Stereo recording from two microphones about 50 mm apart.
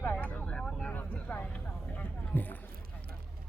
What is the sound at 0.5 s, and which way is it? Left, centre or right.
Vehicle, centre.